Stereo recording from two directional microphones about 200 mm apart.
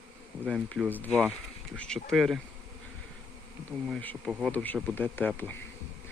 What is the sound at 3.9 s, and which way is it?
Speech, 5° left (ahead or behind).